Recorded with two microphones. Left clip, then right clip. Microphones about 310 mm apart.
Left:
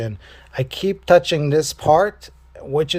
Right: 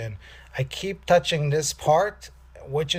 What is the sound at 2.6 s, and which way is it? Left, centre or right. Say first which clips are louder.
Speech: left 7 dB; left.